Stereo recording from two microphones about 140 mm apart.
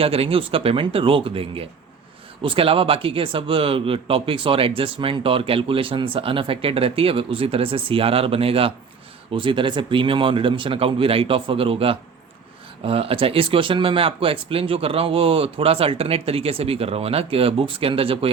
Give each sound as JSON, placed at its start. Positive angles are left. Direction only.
{"t": 0.0, "sound": "speech", "side_deg": -45}